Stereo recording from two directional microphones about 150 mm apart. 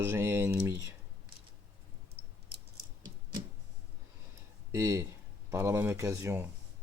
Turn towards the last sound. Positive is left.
turn(degrees=-15)  # may be behind; listen again after turning